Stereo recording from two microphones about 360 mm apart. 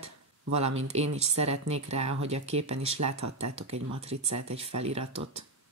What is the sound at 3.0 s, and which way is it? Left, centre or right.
Speech, right.